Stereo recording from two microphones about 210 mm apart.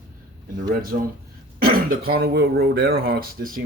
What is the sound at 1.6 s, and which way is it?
Speech, 45° right (ahead or behind).